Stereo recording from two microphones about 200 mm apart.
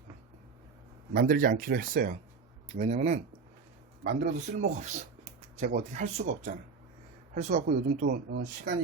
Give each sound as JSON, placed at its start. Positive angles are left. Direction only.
{"t": 1.1, "sound": "speech", "side_deg": -50}
{"t": 2.6, "sound": "speech", "side_deg": -35}
{"t": 8.0, "sound": "speech", "side_deg": -55}